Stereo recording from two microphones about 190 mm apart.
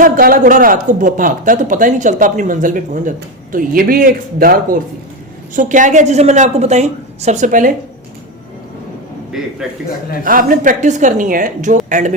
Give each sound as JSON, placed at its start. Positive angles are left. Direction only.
{"t": 0.0, "sound": "a man's voice", "side_deg": -50}
{"t": 10.2, "sound": "a man's voice", "side_deg": -45}